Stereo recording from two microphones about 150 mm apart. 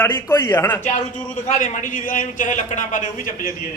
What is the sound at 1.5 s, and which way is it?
A man's voice, 55° left (ahead or behind).